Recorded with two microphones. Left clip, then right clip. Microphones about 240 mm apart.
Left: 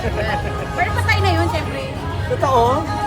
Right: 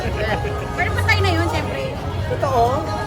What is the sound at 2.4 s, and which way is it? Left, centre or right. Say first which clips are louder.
Music: left 3 dB; left.